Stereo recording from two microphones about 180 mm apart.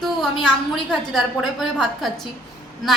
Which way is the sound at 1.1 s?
Centre (ahead or behind).